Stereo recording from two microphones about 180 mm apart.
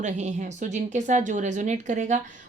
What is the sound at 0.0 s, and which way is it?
A woman's voice, 40° right (ahead or behind).